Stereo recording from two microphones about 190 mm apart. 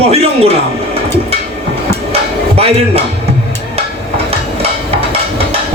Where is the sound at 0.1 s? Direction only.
30° right (ahead or behind).